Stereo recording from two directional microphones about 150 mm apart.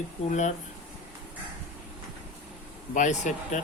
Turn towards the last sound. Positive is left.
turn(degrees=55)  # may be behind; listen again after turning